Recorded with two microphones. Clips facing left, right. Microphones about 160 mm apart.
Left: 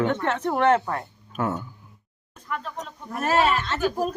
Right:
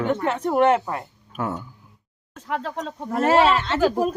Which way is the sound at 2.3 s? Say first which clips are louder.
Right 5 dB; 90° right.